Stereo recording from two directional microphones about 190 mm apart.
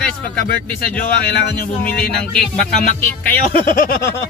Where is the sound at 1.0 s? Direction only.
55° left (ahead or behind).